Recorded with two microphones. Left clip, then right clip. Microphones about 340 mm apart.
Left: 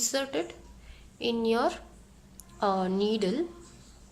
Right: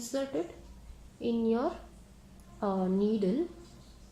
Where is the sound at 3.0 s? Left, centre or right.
Left.